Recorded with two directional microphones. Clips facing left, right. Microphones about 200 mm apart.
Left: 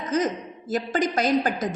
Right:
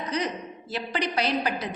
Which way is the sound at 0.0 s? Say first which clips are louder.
Left 5 dB; 45° left (ahead or behind).